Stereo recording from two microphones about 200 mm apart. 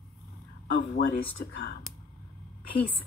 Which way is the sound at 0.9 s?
55° left (ahead or behind).